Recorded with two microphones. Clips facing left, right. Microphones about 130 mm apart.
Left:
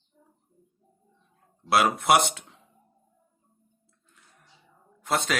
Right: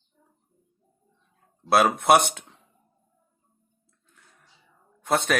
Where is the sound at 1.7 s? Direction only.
55° right (ahead or behind).